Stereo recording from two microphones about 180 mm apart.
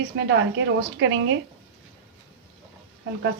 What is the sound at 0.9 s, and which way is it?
Speech, 90° right.